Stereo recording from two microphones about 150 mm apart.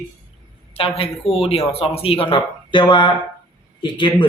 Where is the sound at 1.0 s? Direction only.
40° left (ahead or behind).